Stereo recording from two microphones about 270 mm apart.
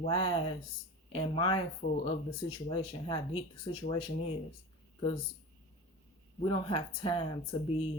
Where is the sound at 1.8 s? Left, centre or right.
Left.